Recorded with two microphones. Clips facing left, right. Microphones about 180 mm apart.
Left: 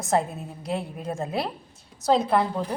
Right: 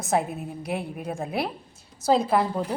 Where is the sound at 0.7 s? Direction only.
Centre (ahead or behind).